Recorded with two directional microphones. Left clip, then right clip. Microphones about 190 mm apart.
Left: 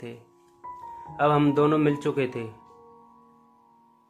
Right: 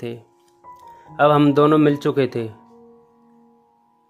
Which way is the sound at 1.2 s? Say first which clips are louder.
Right 7 dB; 35° right (ahead or behind).